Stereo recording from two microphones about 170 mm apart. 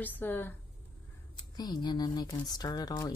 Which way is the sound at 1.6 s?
25° left (ahead or behind).